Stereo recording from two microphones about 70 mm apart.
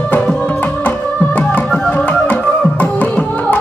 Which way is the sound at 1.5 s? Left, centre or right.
Left.